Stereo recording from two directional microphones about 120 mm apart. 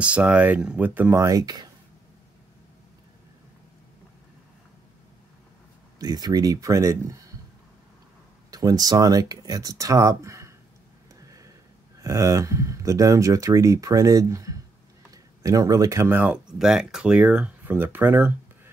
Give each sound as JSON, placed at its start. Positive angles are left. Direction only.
{"t": 0.0, "sound": "speech", "side_deg": -10}
{"t": 5.9, "sound": "speech", "side_deg": -35}
{"t": 8.5, "sound": "speech", "side_deg": -30}
{"t": 11.1, "sound": "a sound", "side_deg": -30}
{"t": 12.0, "sound": "speech", "side_deg": -25}